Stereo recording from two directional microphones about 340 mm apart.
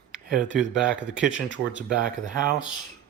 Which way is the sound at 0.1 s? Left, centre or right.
Centre.